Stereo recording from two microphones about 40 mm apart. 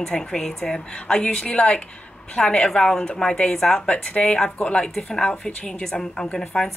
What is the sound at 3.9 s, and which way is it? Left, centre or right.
A woman's voice, left.